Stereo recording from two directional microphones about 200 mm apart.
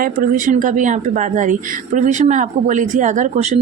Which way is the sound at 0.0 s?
40° right (ahead or behind).